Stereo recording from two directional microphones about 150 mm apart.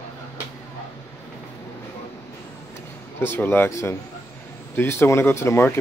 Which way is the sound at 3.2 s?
15° left (ahead or behind).